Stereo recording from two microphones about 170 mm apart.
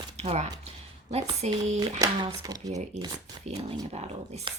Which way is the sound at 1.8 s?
20° right (ahead or behind).